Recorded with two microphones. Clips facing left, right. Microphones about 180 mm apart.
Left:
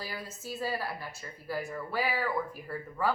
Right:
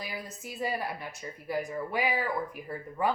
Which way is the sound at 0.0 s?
15° right (ahead or behind).